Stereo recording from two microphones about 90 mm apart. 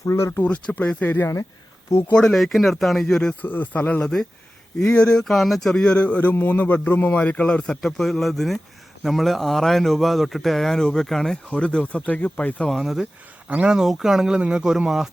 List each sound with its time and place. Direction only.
0.0 s speech: 30° left (ahead or behind)
0.4 s speech: 15° left (ahead or behind)
2.1 s a man's voice: 5° left (ahead or behind)
3.4 s speech: 20° left (ahead or behind)
4.0 s a man's voice: 5° left (ahead or behind)
12.7 s a man's voice: 5° right (ahead or behind)